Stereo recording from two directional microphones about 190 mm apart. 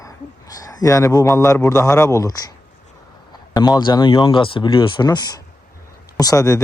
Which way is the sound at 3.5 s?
20° left (ahead or behind).